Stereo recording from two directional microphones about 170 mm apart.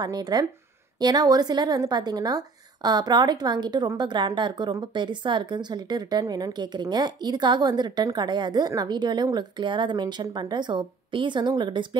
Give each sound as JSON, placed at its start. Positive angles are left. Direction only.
{"t": 0.0, "sound": "a woman's voice", "side_deg": -20}